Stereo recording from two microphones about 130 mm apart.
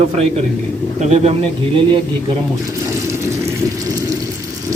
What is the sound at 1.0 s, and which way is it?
Speech, 55° right (ahead or behind).